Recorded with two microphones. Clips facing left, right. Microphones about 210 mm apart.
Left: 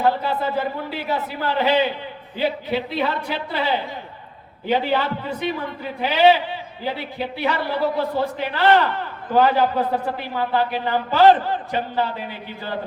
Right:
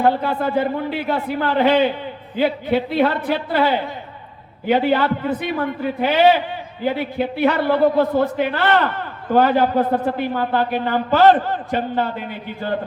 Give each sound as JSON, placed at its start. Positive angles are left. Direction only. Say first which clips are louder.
{"t": 0.0, "sound": "a man's voice", "louder": "right 3 dB", "side_deg": -50}